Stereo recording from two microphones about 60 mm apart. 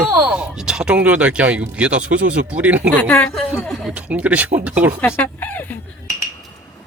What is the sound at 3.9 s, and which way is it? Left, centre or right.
Speech, right.